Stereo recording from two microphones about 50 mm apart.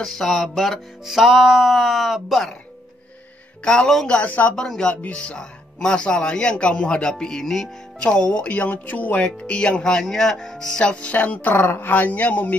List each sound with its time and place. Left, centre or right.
0.0 s speech: centre
1.0 s speech: centre
3.6 s speech: centre
4.2 s a woman's voice: left
4.6 s speech: centre
8.0 s speech: left
9.5 s speech: left
9.9 s speech: centre
10.8 s speech: left
11.5 s a woman's voice: left